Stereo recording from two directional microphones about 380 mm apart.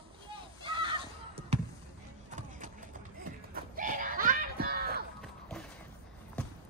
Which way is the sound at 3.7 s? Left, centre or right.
Right.